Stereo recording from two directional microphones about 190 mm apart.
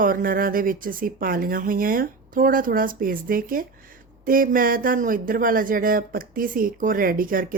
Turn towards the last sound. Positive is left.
turn(degrees=-45)  # may be behind; listen again after turning